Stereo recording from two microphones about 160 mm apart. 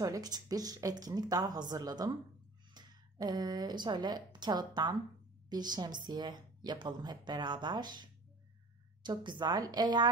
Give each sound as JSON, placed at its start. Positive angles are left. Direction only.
{"t": 0.0, "sound": "a woman's voice", "side_deg": -25}